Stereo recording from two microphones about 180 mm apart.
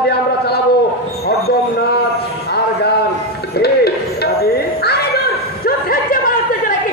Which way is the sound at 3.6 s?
60° left (ahead or behind).